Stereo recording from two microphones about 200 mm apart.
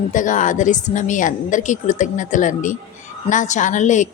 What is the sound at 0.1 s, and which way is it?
A woman's voice, 40° left (ahead or behind).